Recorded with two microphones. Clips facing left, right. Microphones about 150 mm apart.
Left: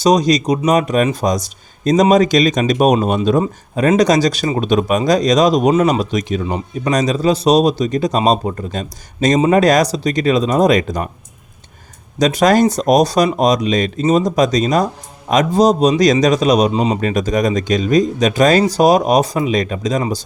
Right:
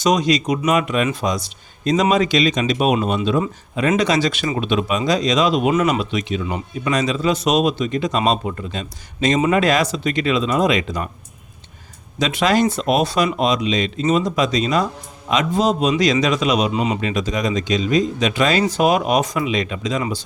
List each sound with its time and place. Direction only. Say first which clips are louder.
0.0 s speech: left 4 dB; 35° left (ahead or behind)
12.2 s speech: left 5 dB; 40° left (ahead or behind)